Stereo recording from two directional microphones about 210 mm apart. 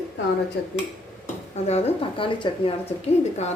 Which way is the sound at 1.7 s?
30° left (ahead or behind).